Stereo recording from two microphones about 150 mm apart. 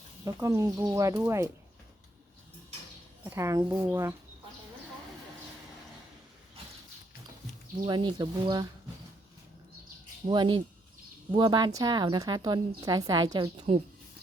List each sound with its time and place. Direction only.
0.3 s a woman's voice: 20° right (ahead or behind)
3.2 s a woman's voice: 20° right (ahead or behind)
7.9 s speech: 30° right (ahead or behind)
10.2 s a woman's voice: 30° right (ahead or behind)